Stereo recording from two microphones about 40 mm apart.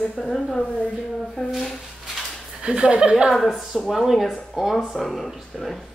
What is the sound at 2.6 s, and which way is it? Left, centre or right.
Speech, right.